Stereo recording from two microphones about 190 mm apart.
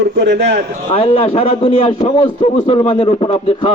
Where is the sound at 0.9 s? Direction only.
30° left (ahead or behind).